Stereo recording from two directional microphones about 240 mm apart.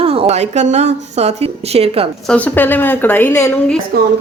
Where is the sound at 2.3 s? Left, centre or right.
Centre.